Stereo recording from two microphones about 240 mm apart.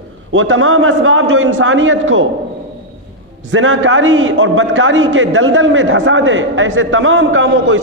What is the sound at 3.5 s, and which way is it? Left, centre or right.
A man's voice, right.